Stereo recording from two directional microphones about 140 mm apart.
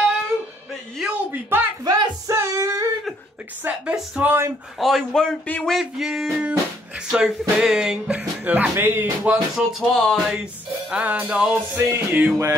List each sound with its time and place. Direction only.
0.9 s a sound: 10° right (ahead or behind)
1.9 s music: 20° right (ahead or behind)
3.6 s speech: 5° right (ahead or behind)
4.7 s speech: centre (ahead or behind)
10.9 s music: 10° right (ahead or behind)